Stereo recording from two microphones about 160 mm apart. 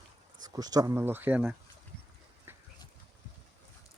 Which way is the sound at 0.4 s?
25° right (ahead or behind).